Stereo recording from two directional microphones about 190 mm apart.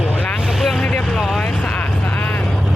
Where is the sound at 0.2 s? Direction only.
10° left (ahead or behind).